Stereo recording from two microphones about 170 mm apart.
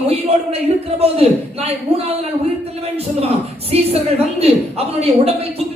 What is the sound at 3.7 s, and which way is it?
A woman's voice, 35° right (ahead or behind).